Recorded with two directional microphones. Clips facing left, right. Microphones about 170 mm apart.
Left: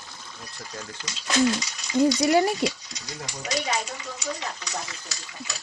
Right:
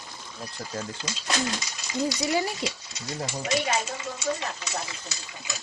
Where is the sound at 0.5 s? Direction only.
25° right (ahead or behind).